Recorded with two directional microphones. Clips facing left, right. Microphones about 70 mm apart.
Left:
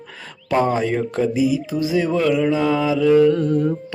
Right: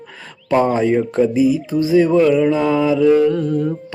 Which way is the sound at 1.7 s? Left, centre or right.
Centre.